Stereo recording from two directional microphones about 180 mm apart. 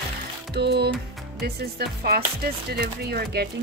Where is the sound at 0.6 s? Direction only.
65° right (ahead or behind).